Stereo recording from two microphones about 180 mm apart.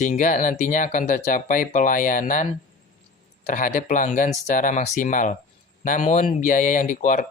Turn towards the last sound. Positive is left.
turn(degrees=45)  # may be behind; listen again after turning